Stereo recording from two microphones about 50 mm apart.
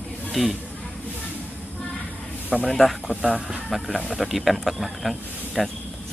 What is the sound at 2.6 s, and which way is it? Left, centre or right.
Speech, centre.